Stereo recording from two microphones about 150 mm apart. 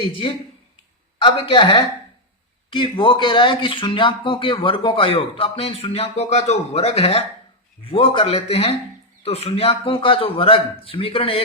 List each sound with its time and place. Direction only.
0.2 s speech: 35° left (ahead or behind)